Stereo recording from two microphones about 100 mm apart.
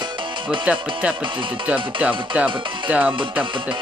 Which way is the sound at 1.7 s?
15° right (ahead or behind).